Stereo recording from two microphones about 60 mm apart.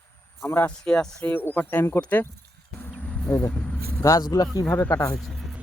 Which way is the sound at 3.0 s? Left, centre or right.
Left.